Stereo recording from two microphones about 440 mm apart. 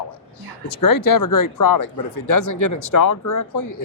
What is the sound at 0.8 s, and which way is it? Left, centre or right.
Speech, left.